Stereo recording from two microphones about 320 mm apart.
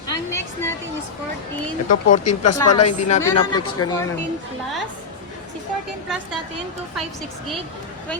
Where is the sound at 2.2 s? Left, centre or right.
Left.